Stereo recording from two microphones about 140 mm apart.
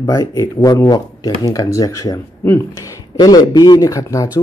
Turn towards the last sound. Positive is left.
turn(degrees=25)  # may be behind; listen again after turning